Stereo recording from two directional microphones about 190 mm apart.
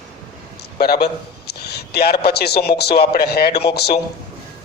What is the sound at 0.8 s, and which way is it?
A man's voice, 55° left (ahead or behind).